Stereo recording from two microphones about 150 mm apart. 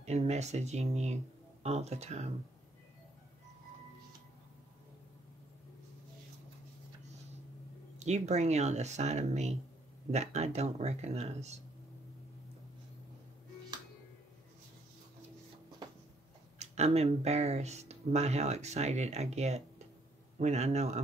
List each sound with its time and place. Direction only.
0.0 s speech: 45° right (ahead or behind)
8.0 s speech: 50° right (ahead or behind)
16.5 s speech: 45° right (ahead or behind)